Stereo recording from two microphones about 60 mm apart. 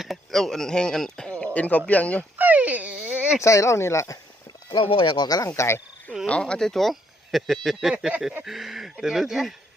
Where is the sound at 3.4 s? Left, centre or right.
Left.